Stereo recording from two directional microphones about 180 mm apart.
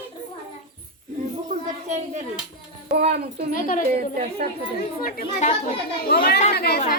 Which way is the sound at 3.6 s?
50° left (ahead or behind).